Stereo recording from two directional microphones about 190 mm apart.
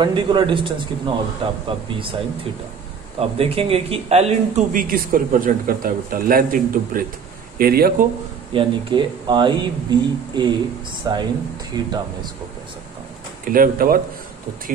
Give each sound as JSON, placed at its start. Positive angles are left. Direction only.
{"t": 0.0, "sound": "speech", "side_deg": -25}
{"t": 3.2, "sound": "speech", "side_deg": -30}
{"t": 8.5, "sound": "speech", "side_deg": -25}
{"t": 13.5, "sound": "speech", "side_deg": -50}